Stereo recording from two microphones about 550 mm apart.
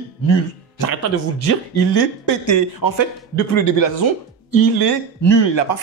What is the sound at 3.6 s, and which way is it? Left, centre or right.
Speech, left.